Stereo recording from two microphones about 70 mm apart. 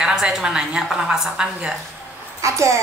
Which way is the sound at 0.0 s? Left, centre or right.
Centre.